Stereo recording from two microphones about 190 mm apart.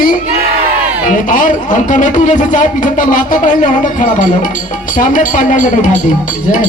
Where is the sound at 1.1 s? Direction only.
45° left (ahead or behind).